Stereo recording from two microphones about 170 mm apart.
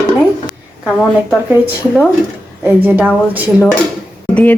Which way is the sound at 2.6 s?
10° right (ahead or behind).